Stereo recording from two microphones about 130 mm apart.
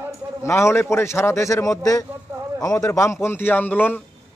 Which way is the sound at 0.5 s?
20° left (ahead or behind).